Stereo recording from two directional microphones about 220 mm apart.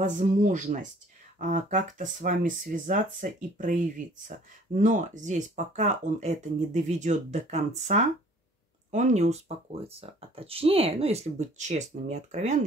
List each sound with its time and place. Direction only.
0.0 s speech: 35° right (ahead or behind)